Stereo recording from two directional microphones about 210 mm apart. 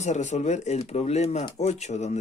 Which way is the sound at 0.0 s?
35° left (ahead or behind).